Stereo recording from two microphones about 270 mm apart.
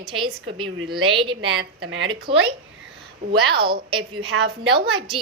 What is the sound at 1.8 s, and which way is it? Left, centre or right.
Speech, right.